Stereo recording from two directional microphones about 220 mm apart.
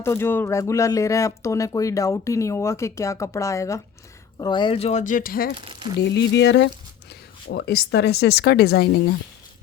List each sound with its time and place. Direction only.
0.0 s speech: 10° left (ahead or behind); by 5.5 s 40° left (ahead or behind)
5.5 s speech: 20° right (ahead or behind)
6.0 s speech: 55° left (ahead or behind)